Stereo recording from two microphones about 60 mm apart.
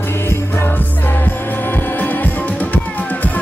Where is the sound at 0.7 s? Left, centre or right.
Left.